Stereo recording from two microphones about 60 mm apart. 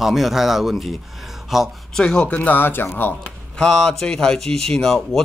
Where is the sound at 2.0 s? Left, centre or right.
Centre.